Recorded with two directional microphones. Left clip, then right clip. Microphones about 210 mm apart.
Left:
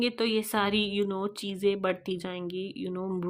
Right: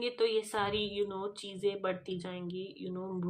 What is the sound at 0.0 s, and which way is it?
Speech, 40° left (ahead or behind).